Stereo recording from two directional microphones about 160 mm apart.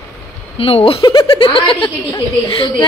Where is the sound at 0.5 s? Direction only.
35° left (ahead or behind).